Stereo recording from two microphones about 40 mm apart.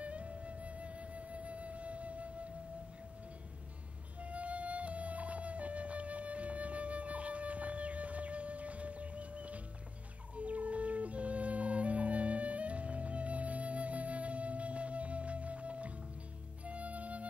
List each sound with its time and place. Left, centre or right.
0.0 s flute: right
4.2 s music: right